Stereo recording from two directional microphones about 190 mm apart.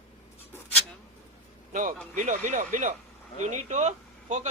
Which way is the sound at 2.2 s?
40° right (ahead or behind).